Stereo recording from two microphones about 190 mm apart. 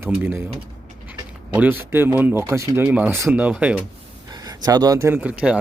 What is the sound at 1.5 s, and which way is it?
Speech, 10° right (ahead or behind).